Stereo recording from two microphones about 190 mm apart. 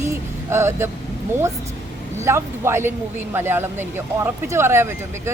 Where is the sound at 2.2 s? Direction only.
15° right (ahead or behind).